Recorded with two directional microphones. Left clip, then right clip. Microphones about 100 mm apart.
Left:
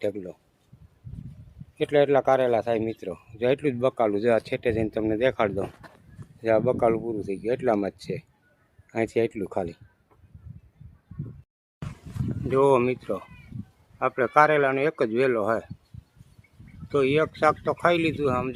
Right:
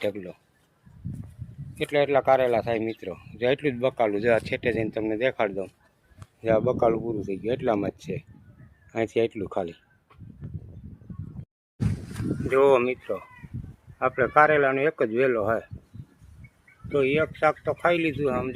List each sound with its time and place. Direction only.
0.0 s speech: 35° left (ahead or behind)
1.8 s speech: 70° left (ahead or behind)
2.2 s speech: 50° left (ahead or behind)
4.4 s speech: 55° left (ahead or behind)
6.4 s speech: 35° left (ahead or behind)
8.9 s speech: 25° left (ahead or behind)
12.5 s speech: 20° left (ahead or behind)
14.1 s speech: centre (ahead or behind)
16.9 s speech: 45° left (ahead or behind)
17.2 s speech: 30° left (ahead or behind)
17.6 s speech: 40° left (ahead or behind)